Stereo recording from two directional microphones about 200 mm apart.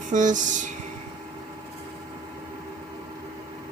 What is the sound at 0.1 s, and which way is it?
Speech, 40° right (ahead or behind).